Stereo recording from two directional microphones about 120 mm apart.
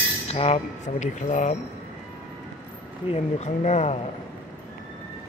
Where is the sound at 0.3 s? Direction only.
60° left (ahead or behind); by 1.6 s 80° left.